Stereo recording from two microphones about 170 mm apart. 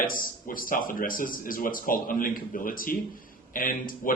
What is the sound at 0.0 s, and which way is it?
Speech, 55° left (ahead or behind).